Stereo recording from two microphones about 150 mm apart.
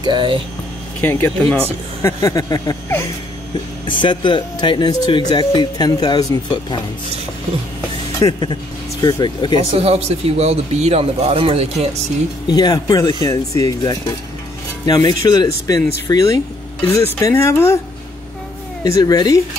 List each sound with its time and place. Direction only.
0.0 s speech: 35° right (ahead or behind)
1.0 s speech: 10° left (ahead or behind)
3.8 s speech: 35° left (ahead or behind)
8.2 s speech: 25° left (ahead or behind)
9.6 s speech: 40° right (ahead or behind)
12.4 s speech: 25° left (ahead or behind)
16.8 s speech: 20° left (ahead or behind)
18.9 s speech: 25° left (ahead or behind)